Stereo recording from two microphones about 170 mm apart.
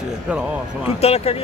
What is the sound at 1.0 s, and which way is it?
Speech, 35° left (ahead or behind).